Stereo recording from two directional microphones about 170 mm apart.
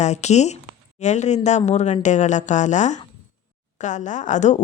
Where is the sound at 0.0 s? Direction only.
40° left (ahead or behind).